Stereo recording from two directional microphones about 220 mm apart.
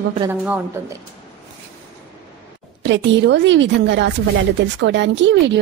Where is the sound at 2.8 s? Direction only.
55° right (ahead or behind).